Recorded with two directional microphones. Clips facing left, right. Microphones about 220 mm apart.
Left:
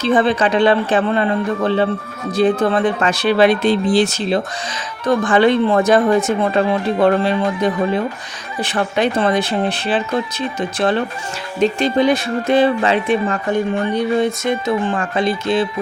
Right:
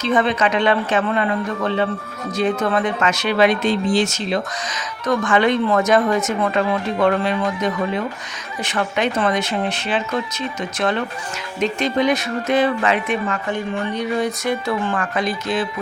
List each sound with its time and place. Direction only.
0.0 s speech: 30° left (ahead or behind)